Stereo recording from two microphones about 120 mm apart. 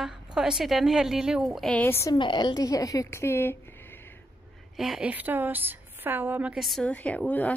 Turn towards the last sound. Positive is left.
turn(degrees=10)  # may be behind; listen again after turning